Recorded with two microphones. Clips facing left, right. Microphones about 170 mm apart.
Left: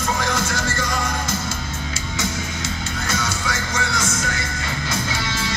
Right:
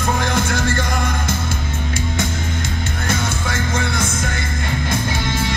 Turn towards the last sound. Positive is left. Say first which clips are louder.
# right 4 dB
turn(degrees=-55)  # may be behind; listen again after turning